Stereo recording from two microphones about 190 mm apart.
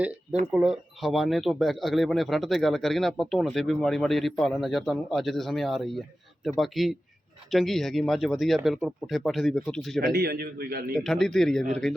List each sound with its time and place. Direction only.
0.5 s speech: centre (ahead or behind)
10.0 s a man's voice: 55° right (ahead or behind)
10.9 s speech: centre (ahead or behind)